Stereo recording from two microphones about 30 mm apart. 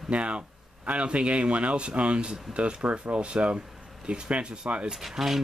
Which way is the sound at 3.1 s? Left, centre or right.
Right.